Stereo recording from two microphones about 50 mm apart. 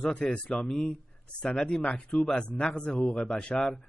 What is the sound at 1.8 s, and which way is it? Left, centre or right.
Speech, left.